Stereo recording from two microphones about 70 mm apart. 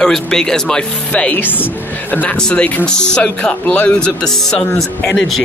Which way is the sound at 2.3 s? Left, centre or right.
Centre.